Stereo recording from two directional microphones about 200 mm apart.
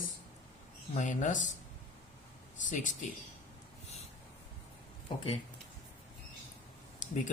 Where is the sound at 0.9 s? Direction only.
40° left (ahead or behind).